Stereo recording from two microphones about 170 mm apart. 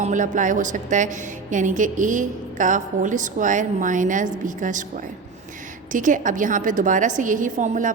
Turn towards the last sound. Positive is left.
turn(degrees=-45)  # may be behind; listen again after turning